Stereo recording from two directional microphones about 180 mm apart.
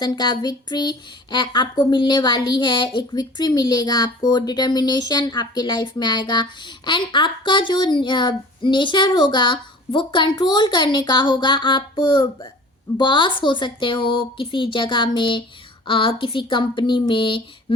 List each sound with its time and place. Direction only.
0.0 s speech: 20° left (ahead or behind)